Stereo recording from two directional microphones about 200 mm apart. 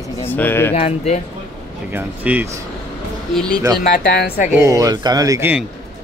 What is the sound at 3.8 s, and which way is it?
Speech, 55° left (ahead or behind).